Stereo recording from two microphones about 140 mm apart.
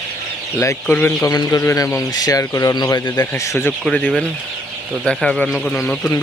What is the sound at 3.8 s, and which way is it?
Speech, 5° left (ahead or behind).